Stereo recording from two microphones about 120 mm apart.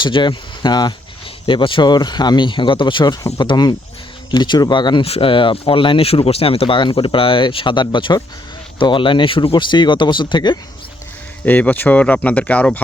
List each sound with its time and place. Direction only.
0.0 s speech: 40° left (ahead or behind)
5.0 s speech: 50° left (ahead or behind)
11.4 s speech: 15° left (ahead or behind)